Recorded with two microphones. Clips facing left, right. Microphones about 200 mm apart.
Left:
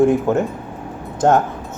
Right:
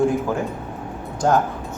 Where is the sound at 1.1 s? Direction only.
25° left (ahead or behind).